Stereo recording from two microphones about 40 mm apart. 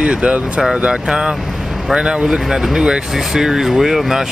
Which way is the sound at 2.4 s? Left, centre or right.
Centre.